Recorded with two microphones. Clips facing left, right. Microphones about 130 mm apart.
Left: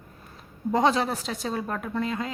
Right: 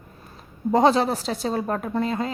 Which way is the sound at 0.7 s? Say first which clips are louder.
Right 5 dB; 35° right (ahead or behind).